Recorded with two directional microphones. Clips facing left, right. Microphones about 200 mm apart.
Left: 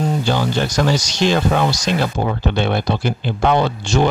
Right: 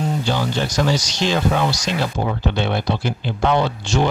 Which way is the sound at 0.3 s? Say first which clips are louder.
Left 3 dB; 55° left (ahead or behind).